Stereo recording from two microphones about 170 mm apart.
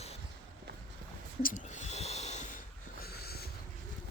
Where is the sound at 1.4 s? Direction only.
50° left (ahead or behind).